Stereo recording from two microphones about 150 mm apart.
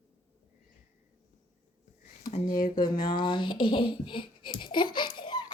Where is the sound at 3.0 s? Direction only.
30° left (ahead or behind).